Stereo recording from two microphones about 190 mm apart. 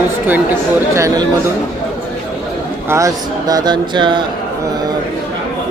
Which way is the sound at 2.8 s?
15° right (ahead or behind).